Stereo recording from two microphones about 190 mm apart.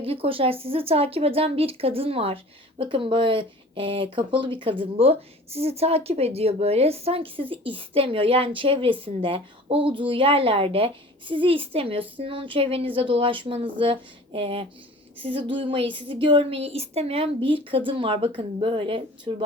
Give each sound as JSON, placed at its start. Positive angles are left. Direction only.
{"t": 0.0, "sound": "speech", "side_deg": -30}